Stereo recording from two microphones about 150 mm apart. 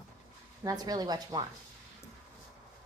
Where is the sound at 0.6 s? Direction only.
25° right (ahead or behind).